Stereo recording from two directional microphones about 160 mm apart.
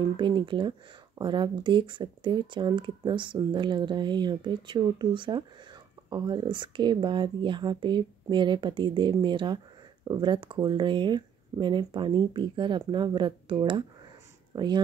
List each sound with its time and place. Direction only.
0.2 s speech: 30° right (ahead or behind)